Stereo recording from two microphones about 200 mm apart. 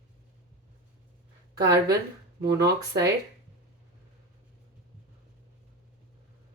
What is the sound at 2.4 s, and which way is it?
Speech, 55° right (ahead or behind).